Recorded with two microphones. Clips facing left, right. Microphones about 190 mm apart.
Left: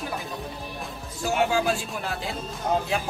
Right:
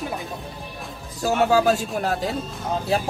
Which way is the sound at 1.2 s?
40° right (ahead or behind).